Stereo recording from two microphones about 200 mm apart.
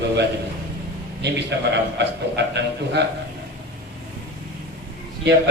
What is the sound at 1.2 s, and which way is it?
A man's voice, 60° right (ahead or behind).